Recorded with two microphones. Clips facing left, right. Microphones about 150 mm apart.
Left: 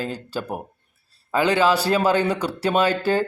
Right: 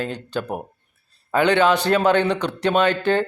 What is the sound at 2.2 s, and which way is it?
Speech, 10° left (ahead or behind).